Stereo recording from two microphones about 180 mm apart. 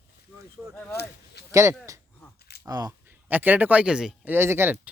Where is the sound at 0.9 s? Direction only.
65° left (ahead or behind).